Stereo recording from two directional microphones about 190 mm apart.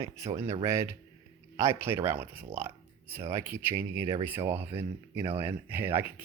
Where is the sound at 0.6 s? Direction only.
15° right (ahead or behind).